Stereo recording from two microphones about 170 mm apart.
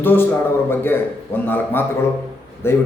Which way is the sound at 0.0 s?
10° left (ahead or behind).